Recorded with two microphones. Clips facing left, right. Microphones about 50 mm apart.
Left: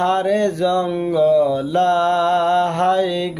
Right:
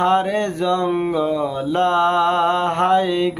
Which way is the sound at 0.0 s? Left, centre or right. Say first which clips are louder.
Left 1 dB; centre.